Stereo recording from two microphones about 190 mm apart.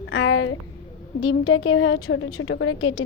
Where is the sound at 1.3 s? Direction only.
90° left.